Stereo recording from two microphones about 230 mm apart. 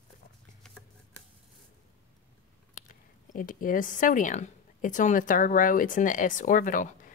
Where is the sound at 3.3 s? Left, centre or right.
Left.